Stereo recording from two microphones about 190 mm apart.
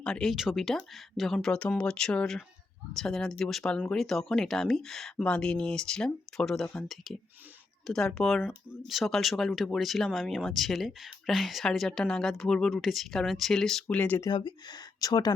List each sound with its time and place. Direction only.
0.0 s speech: 5° left (ahead or behind)
14.3 s speech: 25° left (ahead or behind)